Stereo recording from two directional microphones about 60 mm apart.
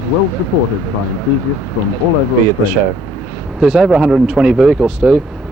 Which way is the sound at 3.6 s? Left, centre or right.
Centre.